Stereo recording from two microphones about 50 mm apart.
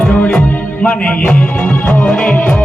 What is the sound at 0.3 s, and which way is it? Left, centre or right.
Music, centre.